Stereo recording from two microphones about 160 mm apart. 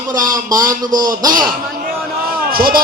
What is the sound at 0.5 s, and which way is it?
Speech, 20° right (ahead or behind).